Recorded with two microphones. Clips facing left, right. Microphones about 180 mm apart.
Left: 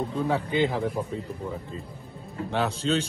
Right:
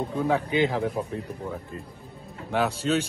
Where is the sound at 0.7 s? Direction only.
Centre (ahead or behind).